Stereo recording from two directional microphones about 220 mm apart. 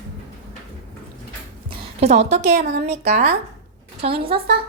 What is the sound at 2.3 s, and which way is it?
A woman's voice, 30° right (ahead or behind).